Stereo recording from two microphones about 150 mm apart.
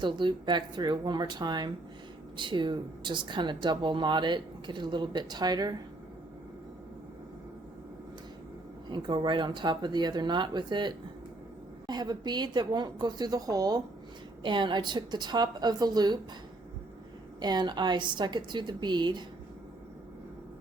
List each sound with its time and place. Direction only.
0.0 s a woman's voice: 30° right (ahead or behind)
8.9 s a woman's voice: 30° right (ahead or behind)
17.4 s a woman's voice: 30° right (ahead or behind)